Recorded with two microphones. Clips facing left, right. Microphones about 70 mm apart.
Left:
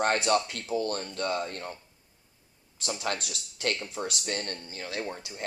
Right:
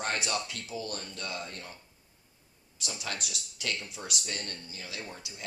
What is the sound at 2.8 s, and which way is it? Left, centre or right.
Speech, left.